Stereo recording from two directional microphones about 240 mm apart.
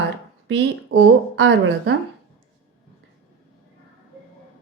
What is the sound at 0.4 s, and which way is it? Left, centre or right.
A woman's voice, right.